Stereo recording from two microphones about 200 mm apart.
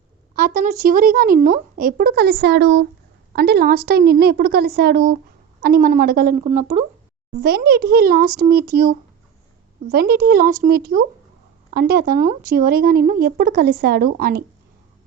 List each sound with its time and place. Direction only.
0.3 s speech: 45° right (ahead or behind)
7.4 s speech: 50° right (ahead or behind)